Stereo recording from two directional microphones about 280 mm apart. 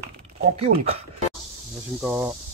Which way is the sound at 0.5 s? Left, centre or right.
Right.